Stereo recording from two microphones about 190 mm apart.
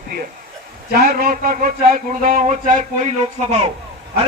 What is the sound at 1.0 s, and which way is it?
A man's voice, 50° right (ahead or behind).